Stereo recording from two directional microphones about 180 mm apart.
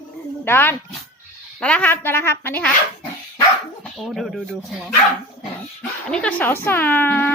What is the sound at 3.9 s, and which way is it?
Speech, centre (ahead or behind).